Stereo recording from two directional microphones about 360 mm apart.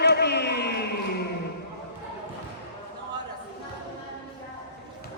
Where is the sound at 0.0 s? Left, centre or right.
Left.